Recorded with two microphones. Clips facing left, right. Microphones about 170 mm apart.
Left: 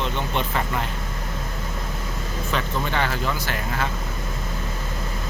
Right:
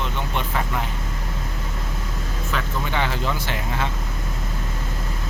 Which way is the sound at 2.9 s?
20° right (ahead or behind).